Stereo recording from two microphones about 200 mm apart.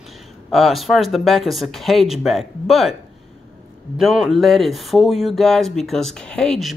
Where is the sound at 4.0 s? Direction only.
Centre (ahead or behind).